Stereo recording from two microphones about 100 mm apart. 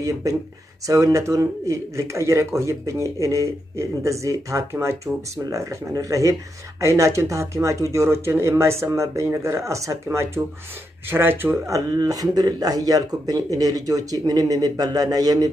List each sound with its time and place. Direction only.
0.0 s speech: 35° right (ahead or behind)
11.7 s speech: 40° right (ahead or behind)